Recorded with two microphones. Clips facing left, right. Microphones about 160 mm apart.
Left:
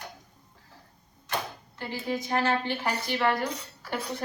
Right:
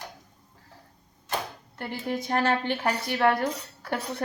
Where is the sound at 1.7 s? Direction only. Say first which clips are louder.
Right 1 dB; 60° right (ahead or behind).